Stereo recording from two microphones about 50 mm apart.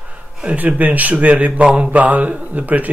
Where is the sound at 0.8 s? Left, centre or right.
Right.